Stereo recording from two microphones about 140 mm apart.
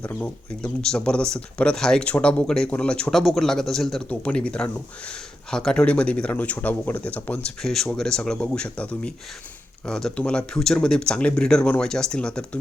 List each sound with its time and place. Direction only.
0.0 s speech: 10° left (ahead or behind)